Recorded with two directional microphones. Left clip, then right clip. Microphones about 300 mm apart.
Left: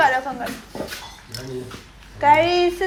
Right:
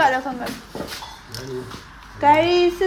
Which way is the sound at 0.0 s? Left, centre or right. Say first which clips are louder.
Even; centre.